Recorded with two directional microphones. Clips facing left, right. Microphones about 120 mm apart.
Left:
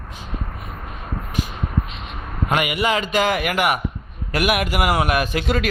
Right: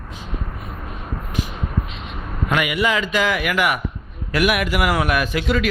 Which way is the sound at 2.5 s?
45° left (ahead or behind).